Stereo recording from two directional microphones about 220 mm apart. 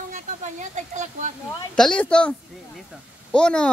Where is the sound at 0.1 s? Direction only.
35° right (ahead or behind).